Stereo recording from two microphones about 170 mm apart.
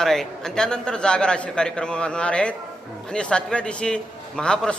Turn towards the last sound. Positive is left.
turn(degrees=5)  # may be behind; listen again after turning